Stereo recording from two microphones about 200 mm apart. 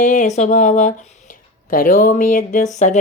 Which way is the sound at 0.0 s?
40° left (ahead or behind).